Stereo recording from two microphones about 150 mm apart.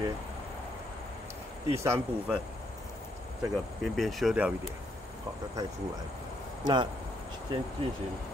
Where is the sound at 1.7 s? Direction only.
20° right (ahead or behind).